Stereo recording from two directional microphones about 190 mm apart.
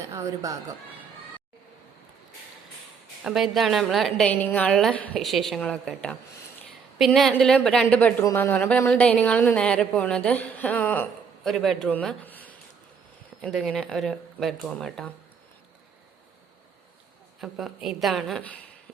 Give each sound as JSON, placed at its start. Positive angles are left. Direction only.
{"t": 0.1, "sound": "speech", "side_deg": -15}
{"t": 3.2, "sound": "a woman's voice", "side_deg": 0}
{"t": 17.4, "sound": "a woman's voice", "side_deg": 0}